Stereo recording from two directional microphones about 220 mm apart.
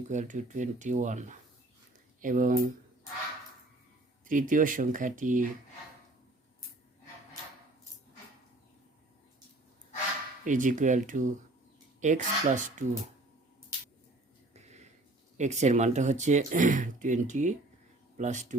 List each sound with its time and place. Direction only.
0.1 s speech: 35° right (ahead or behind)
4.3 s speech: 35° right (ahead or behind)
10.4 s speech: 35° right (ahead or behind)
14.5 s a sound: 30° right (ahead or behind)
15.4 s speech: 30° right (ahead or behind)